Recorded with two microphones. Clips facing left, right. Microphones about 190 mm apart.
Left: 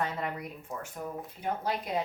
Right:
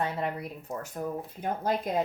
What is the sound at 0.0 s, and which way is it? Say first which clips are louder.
Speech: right 2 dB; 30° right (ahead or behind).